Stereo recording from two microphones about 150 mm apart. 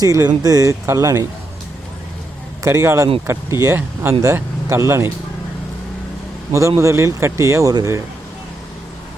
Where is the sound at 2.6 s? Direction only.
20° right (ahead or behind).